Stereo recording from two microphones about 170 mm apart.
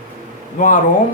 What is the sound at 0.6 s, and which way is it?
Speech, 50° left (ahead or behind).